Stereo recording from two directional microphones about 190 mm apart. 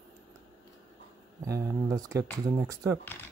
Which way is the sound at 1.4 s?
15° right (ahead or behind).